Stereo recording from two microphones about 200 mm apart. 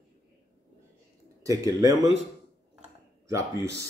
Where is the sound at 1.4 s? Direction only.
15° right (ahead or behind).